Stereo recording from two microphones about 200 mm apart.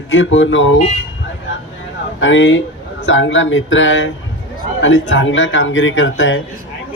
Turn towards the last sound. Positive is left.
turn(degrees=70)  # may be behind; listen again after turning